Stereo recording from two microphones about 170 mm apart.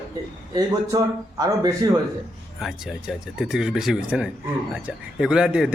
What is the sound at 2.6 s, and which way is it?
A man's voice, centre (ahead or behind).